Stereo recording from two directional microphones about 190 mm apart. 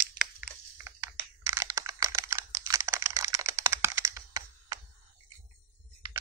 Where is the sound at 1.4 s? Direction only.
15° right (ahead or behind).